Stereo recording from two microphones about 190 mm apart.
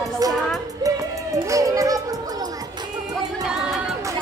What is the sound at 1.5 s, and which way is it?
Music, 15° right (ahead or behind).